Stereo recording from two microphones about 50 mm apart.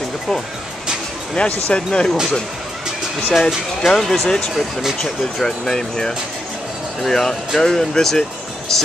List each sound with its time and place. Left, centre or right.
1.3 s speech: centre
3.3 s speech: centre